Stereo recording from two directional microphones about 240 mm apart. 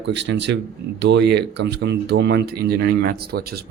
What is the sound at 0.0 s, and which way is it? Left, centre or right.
Speech, right.